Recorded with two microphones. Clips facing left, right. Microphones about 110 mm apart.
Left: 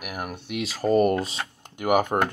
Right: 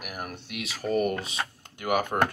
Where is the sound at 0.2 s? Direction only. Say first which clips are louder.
Left 6 dB; 15° left (ahead or behind).